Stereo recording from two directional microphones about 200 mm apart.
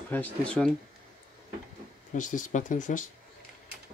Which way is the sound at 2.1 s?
40° left (ahead or behind).